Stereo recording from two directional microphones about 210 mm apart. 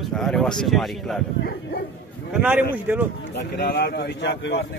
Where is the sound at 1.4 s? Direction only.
50° left (ahead or behind).